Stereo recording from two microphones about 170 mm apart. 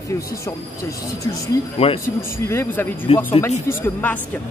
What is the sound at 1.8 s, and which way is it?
Speech, 35° left (ahead or behind).